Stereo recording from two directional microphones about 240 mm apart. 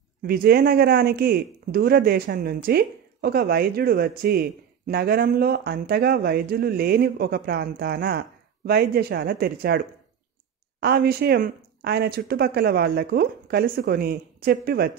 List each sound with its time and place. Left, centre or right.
0.3 s speech: right